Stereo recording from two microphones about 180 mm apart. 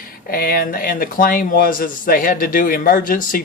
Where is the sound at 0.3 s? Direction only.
55° left (ahead or behind).